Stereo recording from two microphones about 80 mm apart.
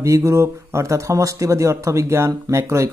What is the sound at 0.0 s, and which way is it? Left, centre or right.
Speech, right.